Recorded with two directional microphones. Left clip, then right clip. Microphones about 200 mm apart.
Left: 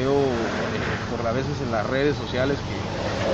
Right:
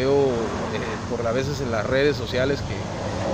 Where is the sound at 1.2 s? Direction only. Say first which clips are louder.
Right 2 dB; 15° right (ahead or behind).